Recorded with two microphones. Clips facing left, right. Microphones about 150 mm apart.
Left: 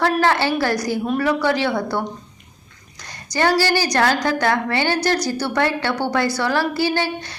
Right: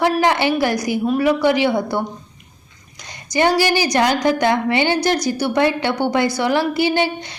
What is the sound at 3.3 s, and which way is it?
A woman's voice, 15° right (ahead or behind).